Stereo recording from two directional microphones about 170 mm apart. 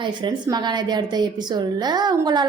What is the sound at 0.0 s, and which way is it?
A woman's voice, 25° right (ahead or behind).